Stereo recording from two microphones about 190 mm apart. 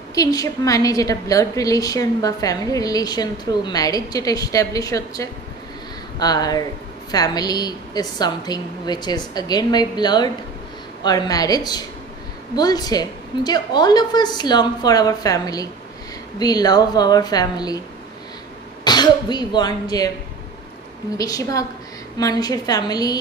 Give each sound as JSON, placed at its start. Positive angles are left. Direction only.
{"t": 0.1, "sound": "a woman's voice", "side_deg": 20}
{"t": 18.9, "sound": "a woman's voice", "side_deg": 20}
{"t": 21.2, "sound": "a woman's voice", "side_deg": 20}